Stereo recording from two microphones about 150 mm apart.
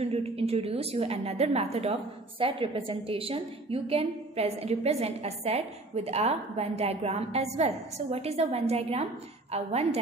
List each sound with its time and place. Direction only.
0.0 s a woman's voice: 40° right (ahead or behind)